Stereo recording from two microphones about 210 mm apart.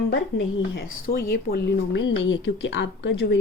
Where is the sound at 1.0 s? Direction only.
45° left (ahead or behind).